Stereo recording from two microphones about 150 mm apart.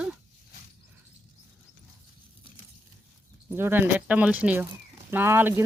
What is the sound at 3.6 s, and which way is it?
Speech, 15° right (ahead or behind).